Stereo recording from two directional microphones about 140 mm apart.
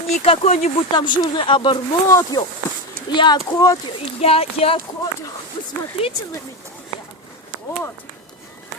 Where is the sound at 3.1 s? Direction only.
30° left (ahead or behind).